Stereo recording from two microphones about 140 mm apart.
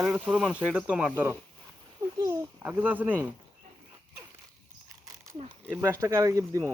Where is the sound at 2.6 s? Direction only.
15° right (ahead or behind).